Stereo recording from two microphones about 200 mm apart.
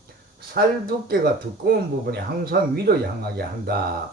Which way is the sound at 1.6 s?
50° right (ahead or behind).